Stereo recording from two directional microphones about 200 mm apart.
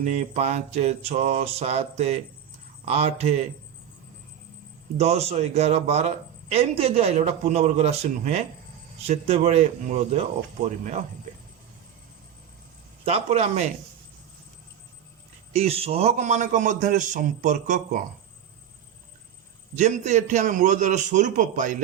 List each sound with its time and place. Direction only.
0.0 s a man's voice: 35° right (ahead or behind)
4.9 s a man's voice: 30° right (ahead or behind)
13.1 s a man's voice: 30° right (ahead or behind)
15.5 s a man's voice: 30° right (ahead or behind)
19.7 s a man's voice: 35° right (ahead or behind)